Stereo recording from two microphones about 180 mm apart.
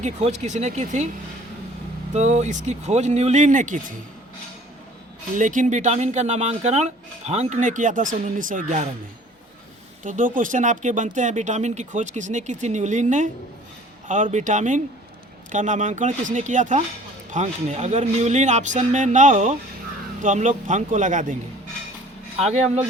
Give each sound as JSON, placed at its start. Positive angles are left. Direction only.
{"t": 0.0, "sound": "speech", "side_deg": -40}
{"t": 2.1, "sound": "speech", "side_deg": -40}
{"t": 5.4, "sound": "speech", "side_deg": -45}
{"t": 10.0, "sound": "speech", "side_deg": -45}
{"t": 22.4, "sound": "speech", "side_deg": -35}